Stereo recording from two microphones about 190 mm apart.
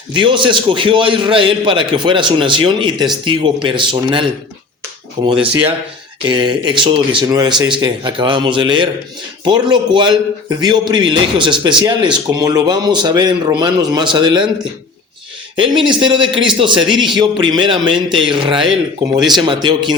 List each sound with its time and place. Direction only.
0.1 s a man's voice: 25° right (ahead or behind)
15.5 s a man's voice: 25° right (ahead or behind)
19.2 s speech: centre (ahead or behind)
19.5 s a man's voice: 25° right (ahead or behind)